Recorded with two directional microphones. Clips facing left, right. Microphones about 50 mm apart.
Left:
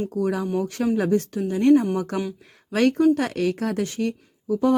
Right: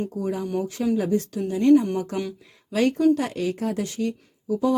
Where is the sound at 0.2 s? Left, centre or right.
Left.